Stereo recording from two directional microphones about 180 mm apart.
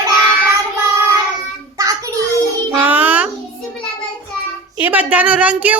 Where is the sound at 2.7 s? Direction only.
10° right (ahead or behind).